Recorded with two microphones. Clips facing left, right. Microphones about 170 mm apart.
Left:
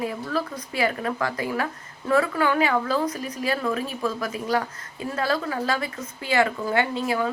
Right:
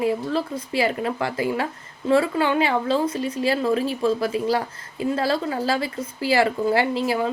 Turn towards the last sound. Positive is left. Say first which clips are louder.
# right 2 dB
turn(degrees=-30)  # may be behind; listen again after turning